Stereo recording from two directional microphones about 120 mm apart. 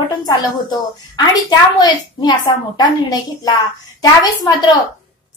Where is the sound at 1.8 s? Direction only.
35° left (ahead or behind).